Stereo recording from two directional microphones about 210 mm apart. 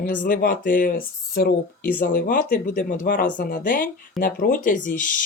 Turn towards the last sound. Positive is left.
turn(degrees=40)  # may be behind; listen again after turning